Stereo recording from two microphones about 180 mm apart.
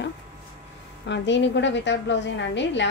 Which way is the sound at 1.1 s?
80° left.